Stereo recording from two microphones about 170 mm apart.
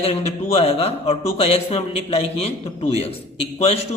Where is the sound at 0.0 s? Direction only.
35° left (ahead or behind).